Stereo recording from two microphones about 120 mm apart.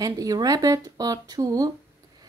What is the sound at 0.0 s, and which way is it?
Speech, 30° right (ahead or behind).